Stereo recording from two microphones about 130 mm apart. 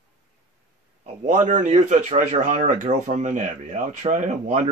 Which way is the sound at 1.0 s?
70° right (ahead or behind).